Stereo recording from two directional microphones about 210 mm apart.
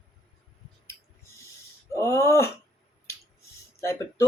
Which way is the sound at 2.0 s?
10° left (ahead or behind).